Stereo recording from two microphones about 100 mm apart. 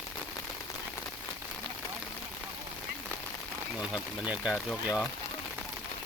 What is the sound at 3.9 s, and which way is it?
Speech, 10° right (ahead or behind).